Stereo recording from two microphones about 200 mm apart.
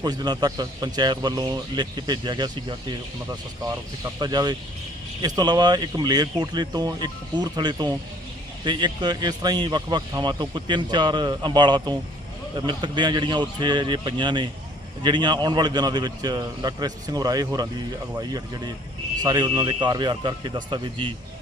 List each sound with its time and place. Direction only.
0.0 s speech: 20° right (ahead or behind)
4.2 s speech: 20° right (ahead or behind)